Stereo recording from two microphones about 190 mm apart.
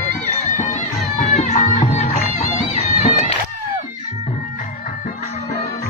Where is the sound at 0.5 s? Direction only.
40° left (ahead or behind).